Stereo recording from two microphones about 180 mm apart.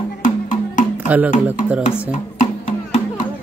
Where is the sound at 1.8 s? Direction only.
45° left (ahead or behind).